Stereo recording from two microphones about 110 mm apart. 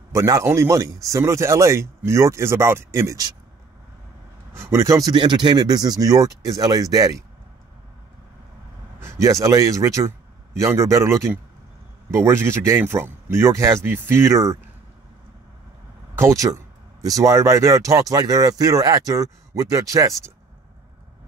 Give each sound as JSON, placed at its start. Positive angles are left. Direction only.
{"t": 0.1, "sound": "speech", "side_deg": -25}
{"t": 4.6, "sound": "speech", "side_deg": -25}
{"t": 9.0, "sound": "speech", "side_deg": -25}
{"t": 16.2, "sound": "speech", "side_deg": -30}